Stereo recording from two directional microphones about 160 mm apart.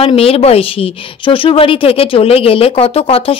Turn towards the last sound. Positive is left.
turn(degrees=35)  # may be behind; listen again after turning